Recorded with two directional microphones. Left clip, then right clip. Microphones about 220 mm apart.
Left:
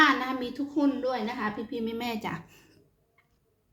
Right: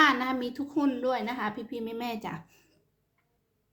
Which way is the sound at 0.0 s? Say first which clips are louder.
Left 1 dB; 10° right (ahead or behind).